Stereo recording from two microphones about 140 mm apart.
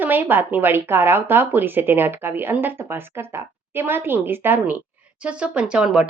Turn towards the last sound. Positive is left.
turn(degrees=-5)  # may be behind; listen again after turning